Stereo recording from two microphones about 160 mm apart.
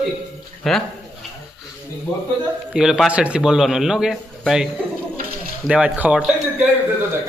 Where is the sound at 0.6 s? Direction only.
5° left (ahead or behind).